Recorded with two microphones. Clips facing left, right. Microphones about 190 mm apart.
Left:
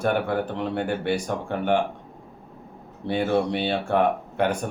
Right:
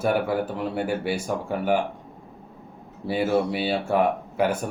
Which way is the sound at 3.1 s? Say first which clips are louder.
Even; 5° right (ahead or behind).